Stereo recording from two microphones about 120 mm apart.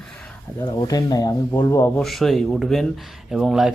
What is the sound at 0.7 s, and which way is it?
Speech, 35° left (ahead or behind).